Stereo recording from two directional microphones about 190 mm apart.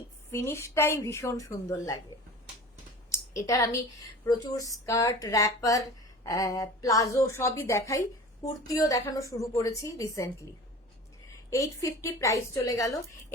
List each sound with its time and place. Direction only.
0.3 s a woman's voice: 15° left (ahead or behind)
3.1 s a woman's voice: 15° left (ahead or behind)